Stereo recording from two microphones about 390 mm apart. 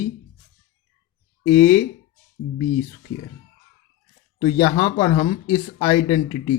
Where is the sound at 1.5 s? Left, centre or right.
Centre.